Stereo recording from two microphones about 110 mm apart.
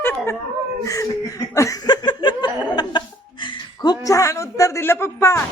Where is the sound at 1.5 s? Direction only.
30° left (ahead or behind).